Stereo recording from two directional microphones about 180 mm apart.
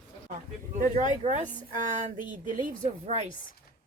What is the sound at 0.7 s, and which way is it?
A woman's voice, 40° right (ahead or behind).